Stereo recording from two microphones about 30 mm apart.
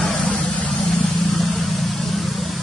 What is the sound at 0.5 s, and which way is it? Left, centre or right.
Vehicle, left.